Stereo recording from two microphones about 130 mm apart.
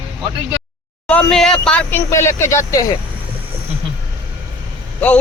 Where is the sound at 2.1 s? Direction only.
20° left (ahead or behind).